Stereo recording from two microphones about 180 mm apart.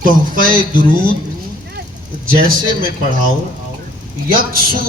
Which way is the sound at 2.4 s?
50° right (ahead or behind).